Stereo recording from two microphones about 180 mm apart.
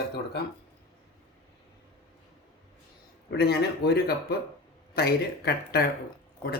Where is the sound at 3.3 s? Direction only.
65° left (ahead or behind).